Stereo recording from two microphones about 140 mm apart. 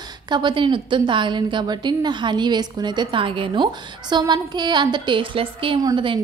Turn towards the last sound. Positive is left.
turn(degrees=-25)  # may be behind; listen again after turning